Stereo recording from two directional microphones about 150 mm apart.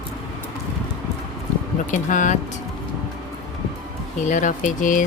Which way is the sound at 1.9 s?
55° left (ahead or behind).